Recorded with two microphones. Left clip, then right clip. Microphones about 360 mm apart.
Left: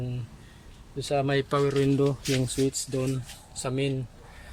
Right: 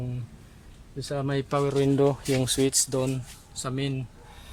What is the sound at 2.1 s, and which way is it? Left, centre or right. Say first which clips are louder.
Speech: right 3 dB; right.